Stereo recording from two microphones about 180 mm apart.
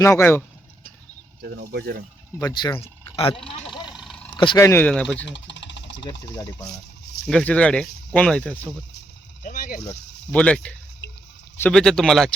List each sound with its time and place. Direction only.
0.0 s speech: 15° left (ahead or behind)
1.4 s speech: 60° right (ahead or behind)
2.4 s speech: 20° left (ahead or behind)
2.8 s speech: 30° left (ahead or behind)
3.8 s vehicle: centre (ahead or behind)
4.5 s speech: 15° left (ahead or behind)
5.1 s a sound: 80° left
6.3 s speech: 20° left (ahead or behind)
7.3 s speech: 5° left (ahead or behind)
9.4 s boat: 50° left (ahead or behind)
10.3 s speech: 5° left (ahead or behind)